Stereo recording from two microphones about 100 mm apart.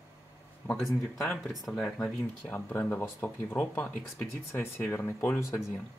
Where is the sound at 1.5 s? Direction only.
Centre (ahead or behind).